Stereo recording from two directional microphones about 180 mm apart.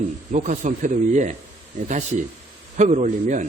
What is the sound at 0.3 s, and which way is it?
A man's voice, 45° right (ahead or behind).